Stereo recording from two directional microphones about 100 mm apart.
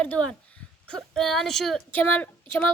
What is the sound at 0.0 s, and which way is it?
Speech, 10° left (ahead or behind).